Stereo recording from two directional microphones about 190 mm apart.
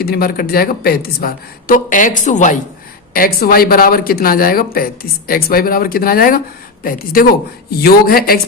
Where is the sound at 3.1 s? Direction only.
50° left (ahead or behind).